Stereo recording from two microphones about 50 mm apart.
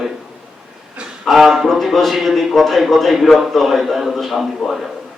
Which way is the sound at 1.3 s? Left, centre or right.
Centre.